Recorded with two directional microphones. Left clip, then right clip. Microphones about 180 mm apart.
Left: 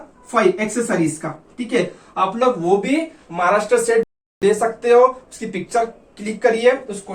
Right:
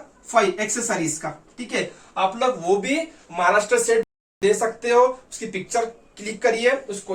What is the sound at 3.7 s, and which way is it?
Speech, 20° right (ahead or behind).